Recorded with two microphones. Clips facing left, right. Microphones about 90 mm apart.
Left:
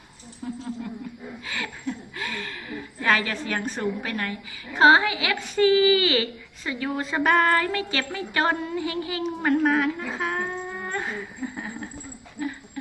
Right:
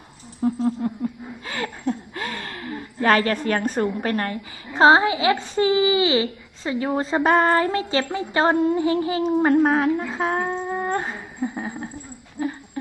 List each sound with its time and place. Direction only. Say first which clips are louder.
0.4 s humming: right 11 dB; 40° right (ahead or behind)
1.5 s a woman's voice: right 6 dB; 40° right (ahead or behind)
4.7 s speech: right 2 dB; 30° right (ahead or behind)
8.6 s humming: right 9 dB; 30° right (ahead or behind)
10.4 s a sound: right 6 dB; 30° right (ahead or behind)
11.4 s speech: right 8 dB; 30° right (ahead or behind)
12.4 s dog: right 4 dB; 35° right (ahead or behind)